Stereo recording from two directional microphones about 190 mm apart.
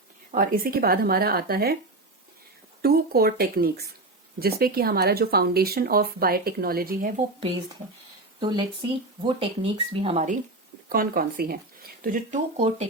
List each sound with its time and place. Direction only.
0.3 s speech: 50° right (ahead or behind)
2.8 s speech: 55° right (ahead or behind)
8.4 s speech: 25° right (ahead or behind)
10.8 s speech: 50° right (ahead or behind)